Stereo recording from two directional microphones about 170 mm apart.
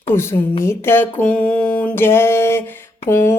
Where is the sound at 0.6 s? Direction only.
15° left (ahead or behind).